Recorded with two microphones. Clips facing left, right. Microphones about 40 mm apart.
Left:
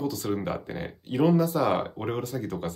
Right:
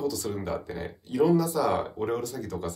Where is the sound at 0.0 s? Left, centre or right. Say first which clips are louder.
Left 1 dB; left.